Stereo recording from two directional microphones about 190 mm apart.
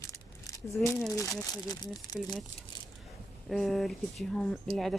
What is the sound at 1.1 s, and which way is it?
Speech, 15° left (ahead or behind).